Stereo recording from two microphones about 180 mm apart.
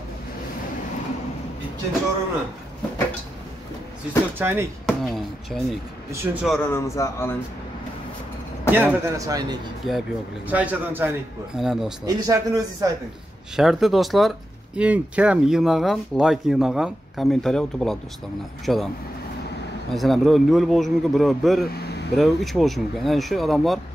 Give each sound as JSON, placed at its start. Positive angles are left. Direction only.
{"t": 4.4, "sound": "speech", "side_deg": -15}
{"t": 4.8, "sound": "speech", "side_deg": 0}
{"t": 6.6, "sound": "a man's voice", "side_deg": 15}
{"t": 8.7, "sound": "speech", "side_deg": -10}
{"t": 9.8, "sound": "speech", "side_deg": -5}
{"t": 12.1, "sound": "a man's voice", "side_deg": -20}
{"t": 13.6, "sound": "speech", "side_deg": 0}
{"t": 19.9, "sound": "speech", "side_deg": 0}